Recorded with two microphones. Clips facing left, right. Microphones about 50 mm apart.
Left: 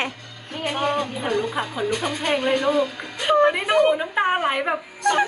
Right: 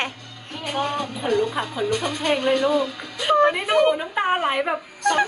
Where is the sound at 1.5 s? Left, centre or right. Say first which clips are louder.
Even; centre.